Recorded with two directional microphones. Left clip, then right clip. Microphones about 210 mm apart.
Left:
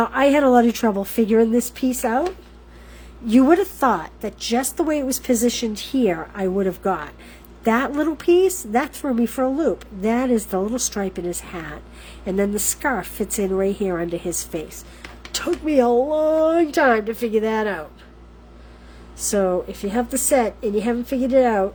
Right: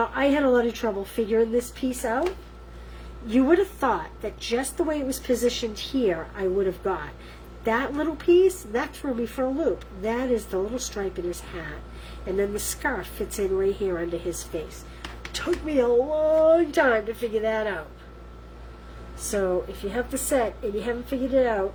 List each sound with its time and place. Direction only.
0.0 s a woman's voice: 55° left (ahead or behind)
3.2 s a woman's voice: 55° left (ahead or behind)
19.3 s a woman's voice: 50° left (ahead or behind)